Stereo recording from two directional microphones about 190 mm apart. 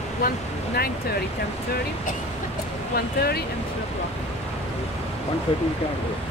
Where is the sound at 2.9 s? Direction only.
55° left (ahead or behind).